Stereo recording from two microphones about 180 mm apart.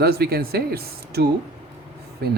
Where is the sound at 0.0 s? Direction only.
60° right (ahead or behind).